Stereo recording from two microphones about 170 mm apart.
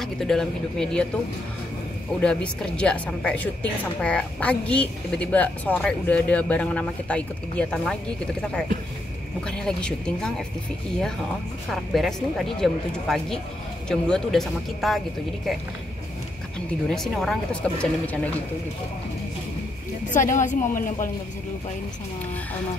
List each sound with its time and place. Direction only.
0.0 s speech: centre (ahead or behind)
2.1 s speech: 5° left (ahead or behind)
11.7 s speech: centre (ahead or behind)
16.9 s speech: centre (ahead or behind)
20.1 s a woman's voice: 50° left (ahead or behind)